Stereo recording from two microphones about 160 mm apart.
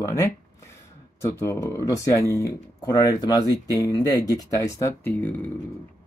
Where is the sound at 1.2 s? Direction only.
20° left (ahead or behind).